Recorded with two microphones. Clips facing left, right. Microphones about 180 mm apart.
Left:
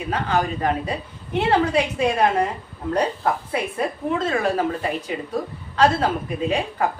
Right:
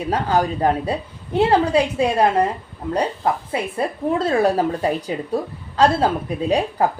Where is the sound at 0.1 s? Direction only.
35° right (ahead or behind).